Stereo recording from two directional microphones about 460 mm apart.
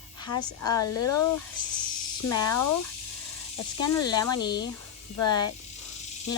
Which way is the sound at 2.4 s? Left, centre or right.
Left.